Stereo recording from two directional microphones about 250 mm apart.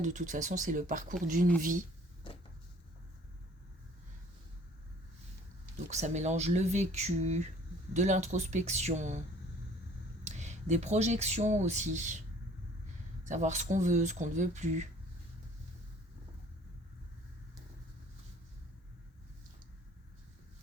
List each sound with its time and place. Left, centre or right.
0.0 s speech: right
5.9 s speech: right
10.2 s speech: right
13.2 s speech: right